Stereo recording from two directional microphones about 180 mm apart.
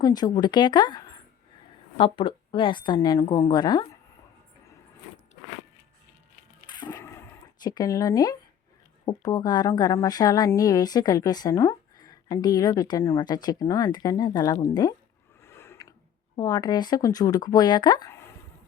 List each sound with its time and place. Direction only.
0.0 s a woman's voice: 20° left (ahead or behind)
6.7 s a sound: 25° left (ahead or behind)
7.6 s a woman's voice: 20° left (ahead or behind)